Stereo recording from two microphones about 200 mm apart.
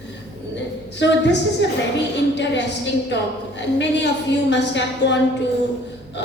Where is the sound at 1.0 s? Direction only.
60° left (ahead or behind).